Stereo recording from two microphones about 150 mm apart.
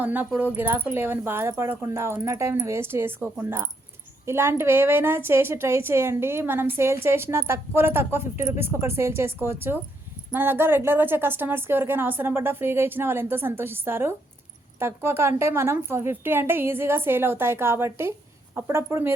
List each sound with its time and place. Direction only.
0.0 s a woman's voice: 10° right (ahead or behind)